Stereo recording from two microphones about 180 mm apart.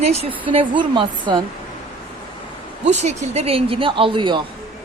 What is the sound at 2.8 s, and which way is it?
Speech, 40° right (ahead or behind).